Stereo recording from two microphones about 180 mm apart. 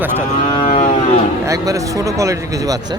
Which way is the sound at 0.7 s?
40° left (ahead or behind).